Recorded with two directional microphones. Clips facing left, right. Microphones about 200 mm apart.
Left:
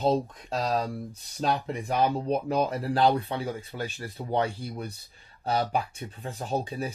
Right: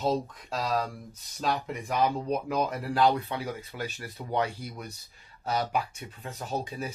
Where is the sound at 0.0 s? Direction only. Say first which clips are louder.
Left 3 dB; 30° left (ahead or behind).